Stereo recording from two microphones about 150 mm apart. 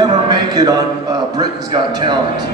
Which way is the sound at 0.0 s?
30° right (ahead or behind).